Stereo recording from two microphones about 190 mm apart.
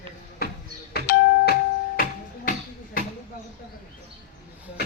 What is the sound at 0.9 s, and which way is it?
Doorbell, 55° left (ahead or behind).